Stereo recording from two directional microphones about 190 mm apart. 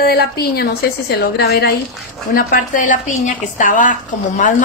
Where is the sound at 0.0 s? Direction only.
55° left (ahead or behind).